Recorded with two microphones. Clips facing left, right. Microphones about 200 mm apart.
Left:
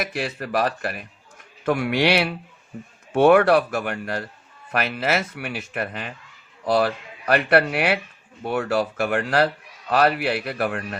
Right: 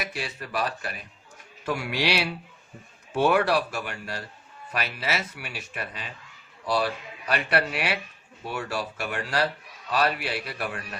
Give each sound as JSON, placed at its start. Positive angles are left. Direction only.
{"t": 0.0, "sound": "a man's voice", "side_deg": 55}